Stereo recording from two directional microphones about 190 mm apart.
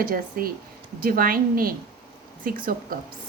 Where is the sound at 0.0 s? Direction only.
50° right (ahead or behind).